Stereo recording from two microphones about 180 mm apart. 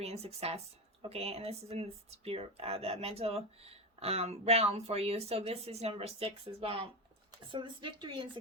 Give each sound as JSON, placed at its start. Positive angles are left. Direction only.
{"t": 0.0, "sound": "speech", "side_deg": -35}